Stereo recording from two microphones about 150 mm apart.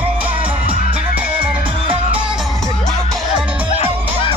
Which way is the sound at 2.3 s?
Centre (ahead or behind).